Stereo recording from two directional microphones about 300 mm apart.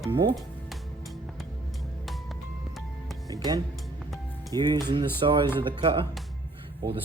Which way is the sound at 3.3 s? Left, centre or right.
Centre.